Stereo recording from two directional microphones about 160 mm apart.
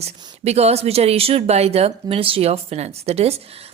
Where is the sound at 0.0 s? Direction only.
40° right (ahead or behind).